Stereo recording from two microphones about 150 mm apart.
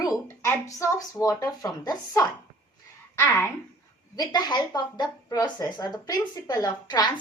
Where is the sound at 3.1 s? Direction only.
10° left (ahead or behind).